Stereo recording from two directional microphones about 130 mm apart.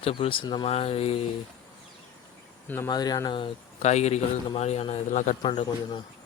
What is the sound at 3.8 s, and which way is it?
Speech, 60° left (ahead or behind).